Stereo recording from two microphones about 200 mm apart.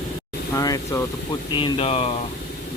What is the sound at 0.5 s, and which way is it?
Speech, 15° left (ahead or behind).